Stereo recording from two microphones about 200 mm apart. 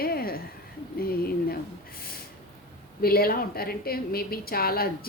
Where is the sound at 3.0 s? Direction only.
50° left (ahead or behind).